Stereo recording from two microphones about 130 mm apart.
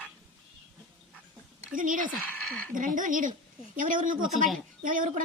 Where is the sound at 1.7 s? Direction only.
90° right.